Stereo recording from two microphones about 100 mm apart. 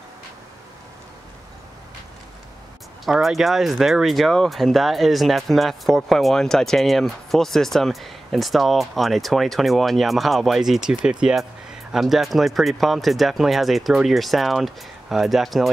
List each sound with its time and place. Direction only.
3.1 s speech: centre (ahead or behind)